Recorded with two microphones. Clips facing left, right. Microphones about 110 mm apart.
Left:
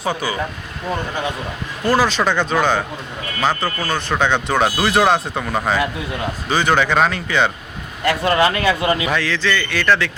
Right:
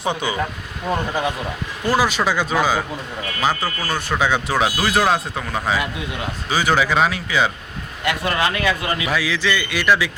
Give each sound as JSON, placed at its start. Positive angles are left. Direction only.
{"t": 0.1, "sound": "speech", "side_deg": -20}
{"t": 1.9, "sound": "a man's voice", "side_deg": -10}
{"t": 8.0, "sound": "speech", "side_deg": 30}
{"t": 9.0, "sound": "a man's voice", "side_deg": -10}